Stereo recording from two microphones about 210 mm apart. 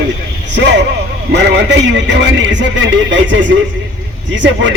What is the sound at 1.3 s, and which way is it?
A man's voice, 60° right (ahead or behind).